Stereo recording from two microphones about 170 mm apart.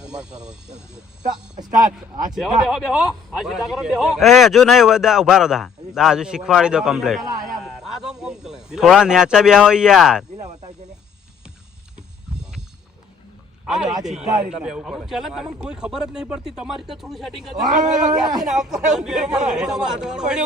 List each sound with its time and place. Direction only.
0.0 s a man's voice: 5° right (ahead or behind)
1.7 s speech: 50° right (ahead or behind)
2.3 s a man's voice: centre (ahead or behind)
13.7 s a man's voice: 5° right (ahead or behind)
17.7 s speech: 50° right (ahead or behind)
18.4 s a man's voice: 5° right (ahead or behind)